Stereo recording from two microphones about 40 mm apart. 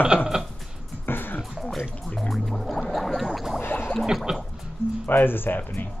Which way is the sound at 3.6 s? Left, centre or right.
Left.